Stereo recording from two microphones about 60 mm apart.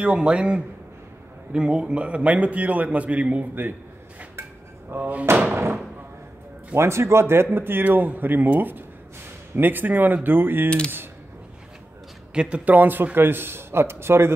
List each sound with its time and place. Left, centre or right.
0.0 s a man's voice: right
4.4 s a sound: right
6.7 s a man's voice: right
12.4 s a man's voice: centre; by 14.3 s right